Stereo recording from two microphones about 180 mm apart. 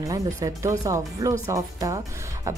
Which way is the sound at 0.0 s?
20° right (ahead or behind).